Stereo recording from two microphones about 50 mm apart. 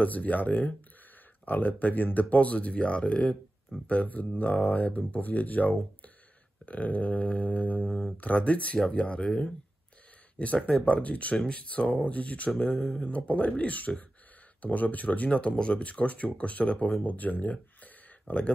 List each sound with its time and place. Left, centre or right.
0.0 s speech: left
7.8 s speech: centre
8.2 s speech: left
10.4 s speech: left
12.4 s speech: centre
13.0 s speech: left